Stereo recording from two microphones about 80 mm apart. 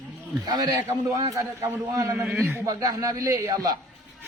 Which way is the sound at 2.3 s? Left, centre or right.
Centre.